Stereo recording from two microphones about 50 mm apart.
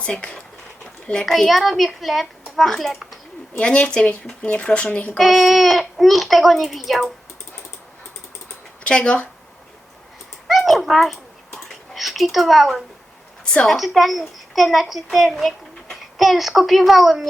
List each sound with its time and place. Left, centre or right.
0.0 s speech: left
1.2 s a child's voice: centre
3.6 s speech: left
5.1 s a child's voice: centre
8.8 s speech: left
10.4 s a sound: centre
13.4 s a sound: centre
13.7 s a child's voice: centre